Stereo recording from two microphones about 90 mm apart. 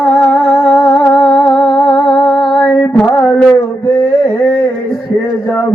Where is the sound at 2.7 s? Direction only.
10° left (ahead or behind).